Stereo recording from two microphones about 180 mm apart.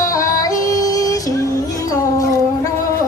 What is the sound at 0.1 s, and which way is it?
Yodeling, 15° left (ahead or behind).